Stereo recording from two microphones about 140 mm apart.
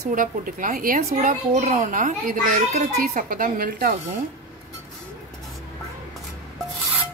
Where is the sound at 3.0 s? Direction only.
80° right.